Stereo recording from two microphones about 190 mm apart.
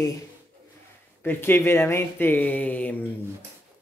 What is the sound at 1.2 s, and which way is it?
A man's voice, 10° left (ahead or behind).